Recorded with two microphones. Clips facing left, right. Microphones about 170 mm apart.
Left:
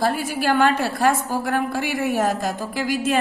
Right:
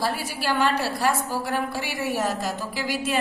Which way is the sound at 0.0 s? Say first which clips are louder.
Left 5 dB; 50° left (ahead or behind).